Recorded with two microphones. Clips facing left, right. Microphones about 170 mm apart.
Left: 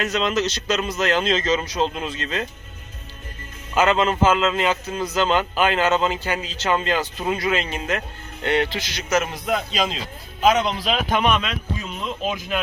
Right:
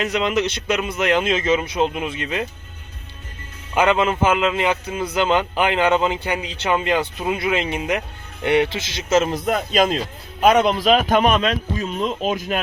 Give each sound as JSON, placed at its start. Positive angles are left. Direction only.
{"t": 0.0, "sound": "speech", "side_deg": -15}
{"t": 3.8, "sound": "a man's voice", "side_deg": -15}
{"t": 9.3, "sound": "a man's voice", "side_deg": -50}